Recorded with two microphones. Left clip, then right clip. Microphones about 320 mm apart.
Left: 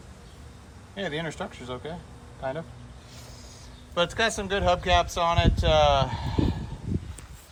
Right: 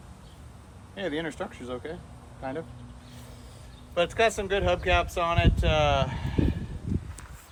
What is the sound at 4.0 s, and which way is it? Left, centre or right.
Speech, centre.